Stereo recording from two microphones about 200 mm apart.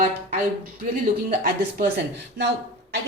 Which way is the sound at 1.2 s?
50° right (ahead or behind).